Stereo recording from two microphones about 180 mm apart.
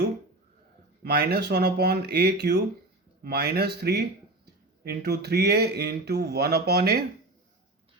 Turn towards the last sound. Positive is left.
turn(degrees=-60)  # may be behind; listen again after turning